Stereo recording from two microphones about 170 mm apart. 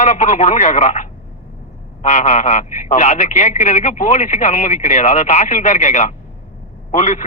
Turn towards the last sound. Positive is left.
turn(degrees=45)  # may be behind; listen again after turning